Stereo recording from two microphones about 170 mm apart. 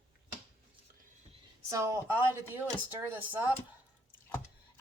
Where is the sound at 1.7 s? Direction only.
15° right (ahead or behind).